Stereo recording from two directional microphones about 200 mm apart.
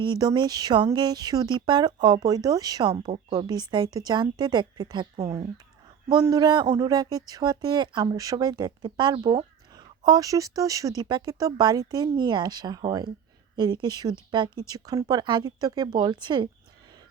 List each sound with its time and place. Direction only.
0.0 s speech: 20° right (ahead or behind)
3.4 s speech: 20° right (ahead or behind)